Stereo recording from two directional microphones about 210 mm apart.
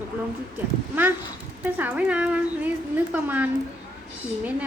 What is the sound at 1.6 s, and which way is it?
A woman's voice, 10° right (ahead or behind).